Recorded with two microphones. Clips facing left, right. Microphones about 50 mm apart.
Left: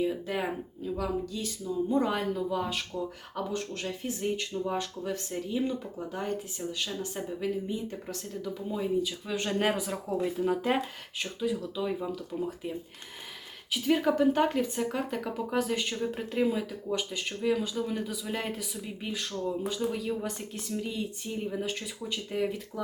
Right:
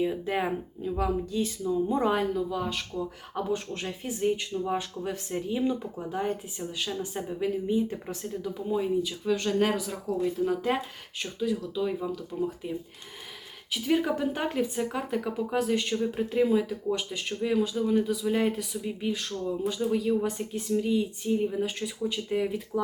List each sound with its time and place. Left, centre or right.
0.0 s speech: centre
1.6 s speech: centre
2.3 s speech: centre
3.3 s speech: centre
8.7 s speech: centre
9.3 s speech: centre
10.2 s speech: centre